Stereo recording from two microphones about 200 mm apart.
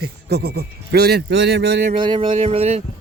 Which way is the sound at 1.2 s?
65° right (ahead or behind).